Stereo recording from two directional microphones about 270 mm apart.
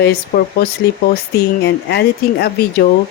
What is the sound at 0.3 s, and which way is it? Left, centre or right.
Speech, left.